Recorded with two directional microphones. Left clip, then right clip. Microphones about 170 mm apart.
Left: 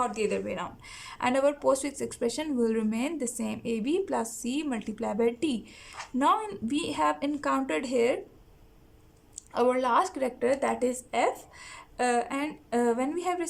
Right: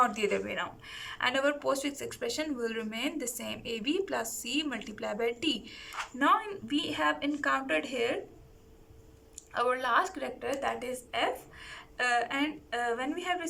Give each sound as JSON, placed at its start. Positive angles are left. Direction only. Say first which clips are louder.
{"t": 0.0, "sound": "speech", "louder": "right 1 dB", "side_deg": 20}
{"t": 9.5, "sound": "speech", "louder": "left 4 dB", "side_deg": 40}